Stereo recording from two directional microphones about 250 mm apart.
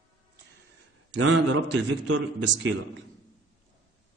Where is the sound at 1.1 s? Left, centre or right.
Right.